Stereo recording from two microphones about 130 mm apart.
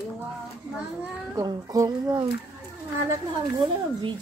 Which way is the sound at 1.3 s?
25° right (ahead or behind).